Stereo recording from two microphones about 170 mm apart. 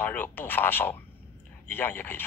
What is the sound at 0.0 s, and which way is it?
Speech, 10° left (ahead or behind).